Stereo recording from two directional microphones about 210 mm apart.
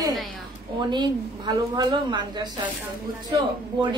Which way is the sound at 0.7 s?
20° right (ahead or behind).